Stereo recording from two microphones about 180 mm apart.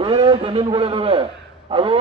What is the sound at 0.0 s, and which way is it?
A man's voice, 30° right (ahead or behind).